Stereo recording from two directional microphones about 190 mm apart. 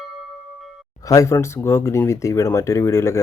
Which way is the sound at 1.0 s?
15° left (ahead or behind).